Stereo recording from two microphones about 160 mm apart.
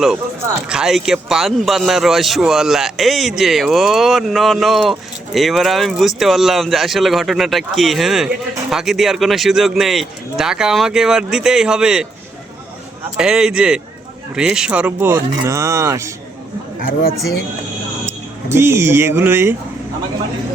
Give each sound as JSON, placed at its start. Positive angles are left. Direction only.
{"t": 0.7, "sound": "a man's voice", "side_deg": -5}
{"t": 13.1, "sound": "a man's voice", "side_deg": -5}
{"t": 18.4, "sound": "speech", "side_deg": -15}